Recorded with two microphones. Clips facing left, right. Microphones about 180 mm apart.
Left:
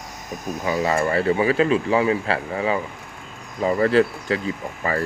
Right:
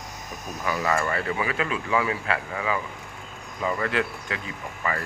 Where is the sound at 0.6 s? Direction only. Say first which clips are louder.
Left 4 dB; 25° left (ahead or behind).